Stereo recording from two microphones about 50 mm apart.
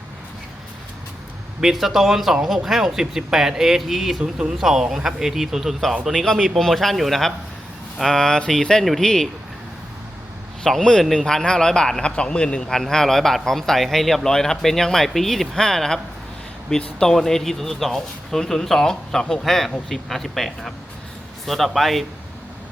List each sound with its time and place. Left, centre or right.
1.6 s speech: centre
4.2 s speech: centre
6.6 s speech: centre
9.0 s speech: centre
10.6 s a man's voice: centre
12.6 s speech: centre